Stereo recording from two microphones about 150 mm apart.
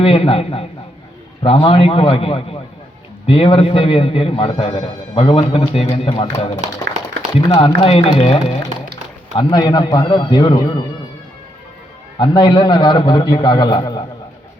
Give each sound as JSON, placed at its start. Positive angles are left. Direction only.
{"t": 0.0, "sound": "a man's voice", "side_deg": 35}
{"t": 9.3, "sound": "a man's voice", "side_deg": 30}
{"t": 12.2, "sound": "a man's voice", "side_deg": 30}